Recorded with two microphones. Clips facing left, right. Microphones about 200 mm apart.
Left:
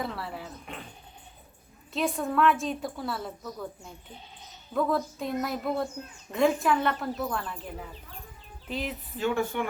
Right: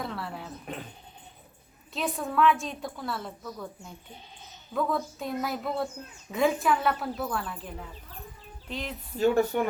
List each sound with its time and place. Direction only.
0.0 s a woman's voice: centre (ahead or behind)
1.9 s a woman's voice: centre (ahead or behind)
9.1 s speech: 40° right (ahead or behind)